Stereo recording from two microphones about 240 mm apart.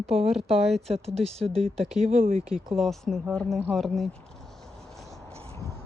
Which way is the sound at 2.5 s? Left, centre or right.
Centre.